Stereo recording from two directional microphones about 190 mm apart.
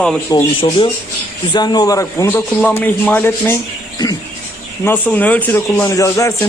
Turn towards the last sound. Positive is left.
turn(degrees=15)  # may be behind; listen again after turning